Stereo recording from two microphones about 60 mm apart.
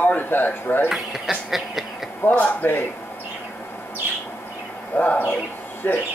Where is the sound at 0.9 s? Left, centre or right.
Centre.